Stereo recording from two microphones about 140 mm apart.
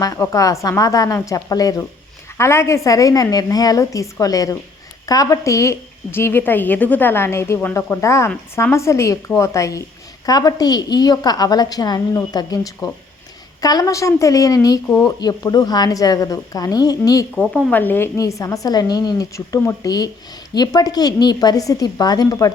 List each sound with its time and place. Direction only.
0.0 s a woman's voice: 25° left (ahead or behind)
17.3 s a woman's voice: 5° left (ahead or behind); by 22.5 s 25° left (ahead or behind)